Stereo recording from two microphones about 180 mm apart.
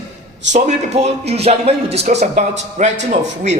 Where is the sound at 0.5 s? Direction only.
35° right (ahead or behind).